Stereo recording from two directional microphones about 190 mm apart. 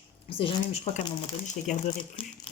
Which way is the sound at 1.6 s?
40° left (ahead or behind).